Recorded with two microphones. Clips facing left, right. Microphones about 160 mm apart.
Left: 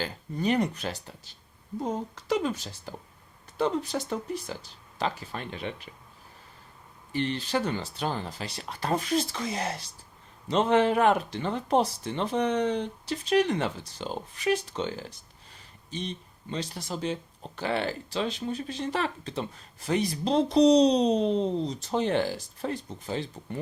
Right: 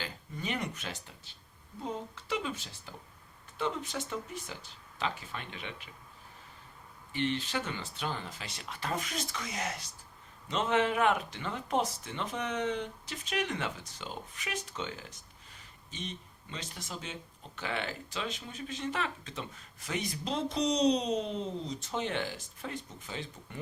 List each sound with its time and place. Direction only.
0.0 s speech: 40° left (ahead or behind)
7.1 s speech: 35° left (ahead or behind)